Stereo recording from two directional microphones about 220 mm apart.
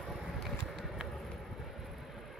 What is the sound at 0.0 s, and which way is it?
Vehicle, centre (ahead or behind).